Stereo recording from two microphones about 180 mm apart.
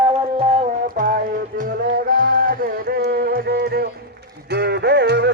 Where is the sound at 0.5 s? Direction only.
35° right (ahead or behind).